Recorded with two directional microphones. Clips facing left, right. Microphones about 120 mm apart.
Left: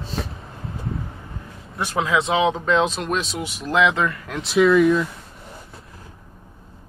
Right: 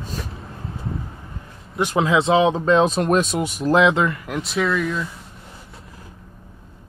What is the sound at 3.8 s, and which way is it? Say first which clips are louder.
Speech: right 1 dB; 30° right (ahead or behind).